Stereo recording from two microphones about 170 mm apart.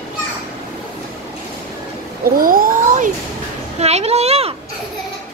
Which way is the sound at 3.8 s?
40° right (ahead or behind).